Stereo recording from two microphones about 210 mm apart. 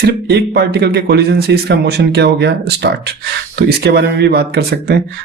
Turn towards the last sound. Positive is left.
turn(degrees=-50)  # may be behind; listen again after turning